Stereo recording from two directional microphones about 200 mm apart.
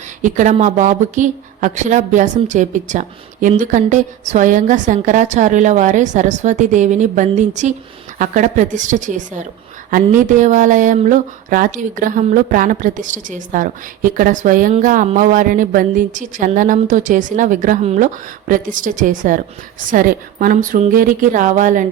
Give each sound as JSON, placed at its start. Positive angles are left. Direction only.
{"t": 0.2, "sound": "speech", "side_deg": -40}